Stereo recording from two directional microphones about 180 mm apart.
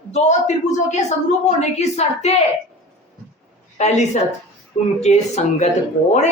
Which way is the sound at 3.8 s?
40° left (ahead or behind).